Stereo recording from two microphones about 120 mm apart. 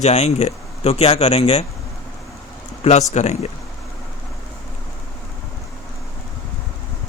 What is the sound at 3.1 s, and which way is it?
Speech, 70° left (ahead or behind).